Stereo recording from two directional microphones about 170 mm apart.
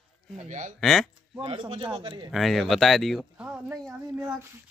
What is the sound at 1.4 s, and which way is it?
Speech, 30° right (ahead or behind).